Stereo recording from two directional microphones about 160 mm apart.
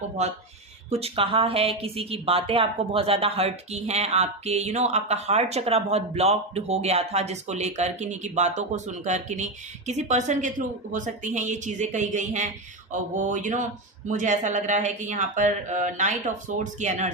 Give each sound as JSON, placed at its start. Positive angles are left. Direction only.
{"t": 0.2, "sound": "a woman's voice", "side_deg": -45}